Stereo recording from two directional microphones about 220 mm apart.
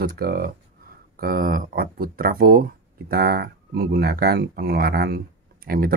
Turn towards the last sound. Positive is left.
turn(degrees=-40)  # may be behind; listen again after turning